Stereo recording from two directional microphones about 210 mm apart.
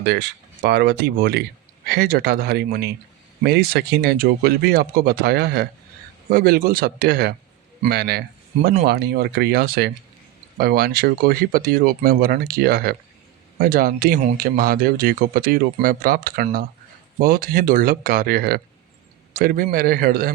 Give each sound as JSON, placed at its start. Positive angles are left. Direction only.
{"t": 0.0, "sound": "speech", "side_deg": -50}